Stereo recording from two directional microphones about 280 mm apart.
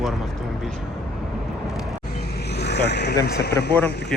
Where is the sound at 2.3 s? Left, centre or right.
Left.